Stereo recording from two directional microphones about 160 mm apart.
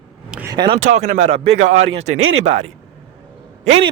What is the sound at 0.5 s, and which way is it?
Speech, 30° right (ahead or behind).